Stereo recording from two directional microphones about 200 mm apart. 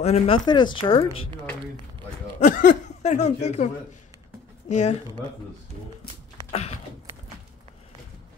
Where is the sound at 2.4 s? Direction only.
40° left (ahead or behind).